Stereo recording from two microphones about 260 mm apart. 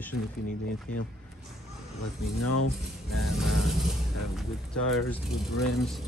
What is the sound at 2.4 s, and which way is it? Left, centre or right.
Speech, left.